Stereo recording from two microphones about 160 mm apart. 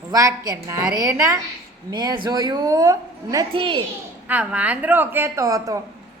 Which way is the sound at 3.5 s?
30° right (ahead or behind).